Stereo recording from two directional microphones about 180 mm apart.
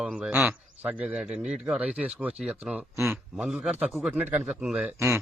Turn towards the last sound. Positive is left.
turn(degrees=-10)  # may be behind; listen again after turning